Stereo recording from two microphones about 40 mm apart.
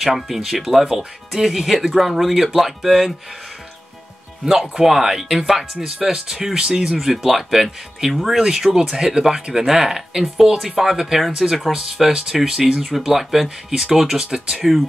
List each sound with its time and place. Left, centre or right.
0.0 s speech: centre
4.5 s speech: centre
7.2 s speech: centre
8.4 s speech: centre
12.8 s speech: centre